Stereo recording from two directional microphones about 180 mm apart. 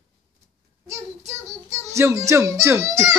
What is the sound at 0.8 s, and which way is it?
A child's voice, 15° right (ahead or behind).